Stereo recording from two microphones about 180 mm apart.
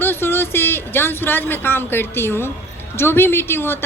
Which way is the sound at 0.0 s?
10° left (ahead or behind).